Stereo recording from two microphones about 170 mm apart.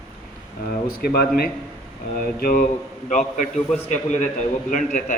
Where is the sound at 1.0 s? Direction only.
65° left (ahead or behind).